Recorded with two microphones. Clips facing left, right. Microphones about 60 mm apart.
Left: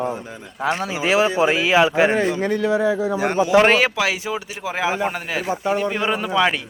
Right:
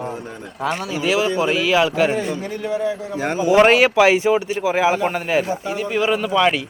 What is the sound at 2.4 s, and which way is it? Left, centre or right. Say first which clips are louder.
Speech: left 5 dB; left.